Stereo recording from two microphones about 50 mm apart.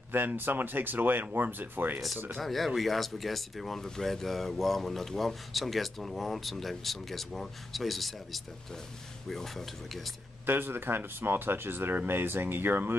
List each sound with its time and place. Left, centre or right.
0.1 s speech: right
2.3 s speech: centre
10.4 s speech: right